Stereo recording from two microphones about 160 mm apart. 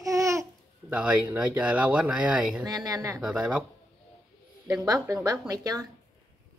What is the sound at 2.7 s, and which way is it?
Speech, 25° right (ahead or behind).